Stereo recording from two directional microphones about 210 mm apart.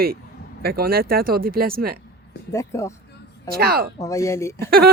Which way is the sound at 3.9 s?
15° left (ahead or behind).